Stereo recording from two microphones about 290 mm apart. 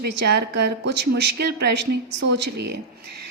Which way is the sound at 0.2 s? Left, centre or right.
Right.